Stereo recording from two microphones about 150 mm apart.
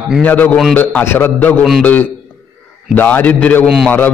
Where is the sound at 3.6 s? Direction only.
5° right (ahead or behind).